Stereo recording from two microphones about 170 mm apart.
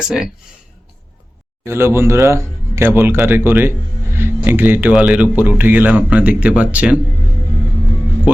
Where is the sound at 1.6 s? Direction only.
15° right (ahead or behind).